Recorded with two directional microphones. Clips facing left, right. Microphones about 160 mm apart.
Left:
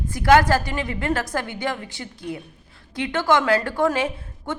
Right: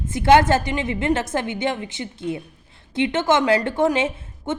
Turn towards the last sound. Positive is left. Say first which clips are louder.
# right 2 dB
turn(degrees=-20)  # may be behind; listen again after turning